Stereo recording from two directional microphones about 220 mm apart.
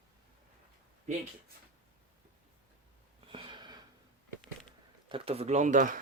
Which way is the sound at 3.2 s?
20° right (ahead or behind).